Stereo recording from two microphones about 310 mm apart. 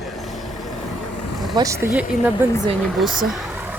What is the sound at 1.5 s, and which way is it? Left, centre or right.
Speech, centre.